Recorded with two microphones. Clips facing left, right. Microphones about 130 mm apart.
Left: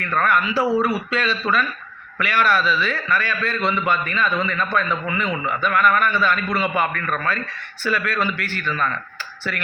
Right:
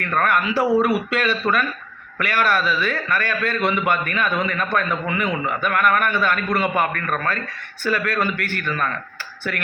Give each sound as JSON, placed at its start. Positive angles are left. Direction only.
{"t": 0.2, "sound": "a man's voice", "side_deg": -55}